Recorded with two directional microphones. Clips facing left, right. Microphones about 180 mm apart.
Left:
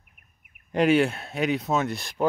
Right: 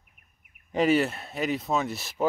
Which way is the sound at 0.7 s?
5° right (ahead or behind).